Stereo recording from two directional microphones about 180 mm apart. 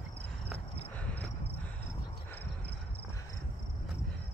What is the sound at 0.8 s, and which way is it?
Cricket, 10° left (ahead or behind).